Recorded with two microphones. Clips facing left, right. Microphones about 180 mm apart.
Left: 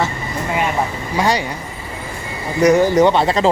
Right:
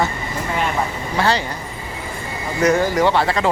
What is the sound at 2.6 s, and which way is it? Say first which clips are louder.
Speech: left 4 dB; 20° left (ahead or behind).